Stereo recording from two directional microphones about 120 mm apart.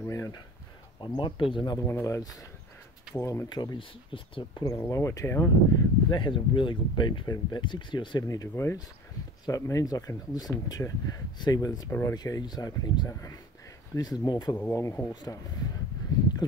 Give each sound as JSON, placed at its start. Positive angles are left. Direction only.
{"t": 0.0, "sound": "a sound", "side_deg": 25}
{"t": 1.0, "sound": "speech", "side_deg": 40}
{"t": 1.9, "sound": "speech", "side_deg": 25}
{"t": 3.4, "sound": "speech", "side_deg": 40}
{"t": 4.6, "sound": "speech", "side_deg": 25}
{"t": 6.0, "sound": "speech", "side_deg": 40}
{"t": 14.6, "sound": "speech", "side_deg": 20}
{"t": 15.2, "sound": "speech", "side_deg": 30}